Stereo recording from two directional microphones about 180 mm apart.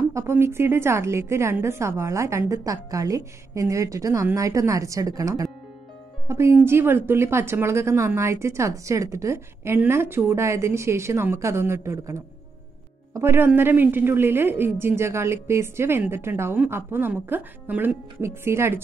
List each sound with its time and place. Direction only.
0.1 s speech: 15° right (ahead or behind)